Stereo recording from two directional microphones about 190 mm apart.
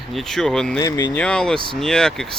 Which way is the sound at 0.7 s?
15° left (ahead or behind).